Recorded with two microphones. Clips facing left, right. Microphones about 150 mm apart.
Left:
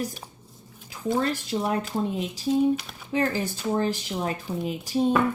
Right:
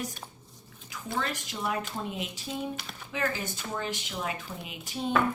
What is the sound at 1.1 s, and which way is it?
Speech, 35° left (ahead or behind).